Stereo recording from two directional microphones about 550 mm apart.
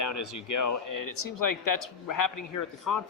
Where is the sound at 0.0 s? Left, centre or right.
Left.